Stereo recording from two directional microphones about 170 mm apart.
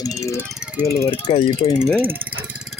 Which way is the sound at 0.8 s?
15° left (ahead or behind).